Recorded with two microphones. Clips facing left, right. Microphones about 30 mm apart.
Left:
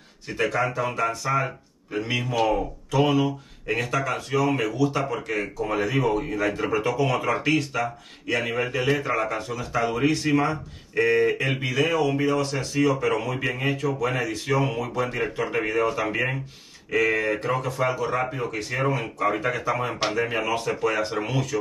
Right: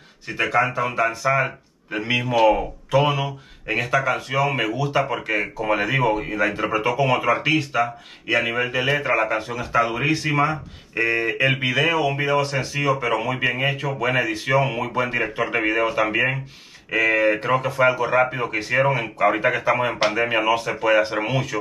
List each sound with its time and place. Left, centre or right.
0.3 s speech: centre
9.0 s speech: right
9.8 s speech: centre
20.0 s speech: centre